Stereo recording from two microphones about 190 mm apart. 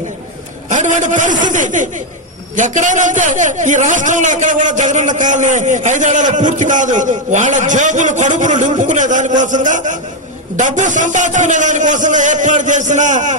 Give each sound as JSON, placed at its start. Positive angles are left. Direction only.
{"t": 0.7, "sound": "a man's voice", "side_deg": -40}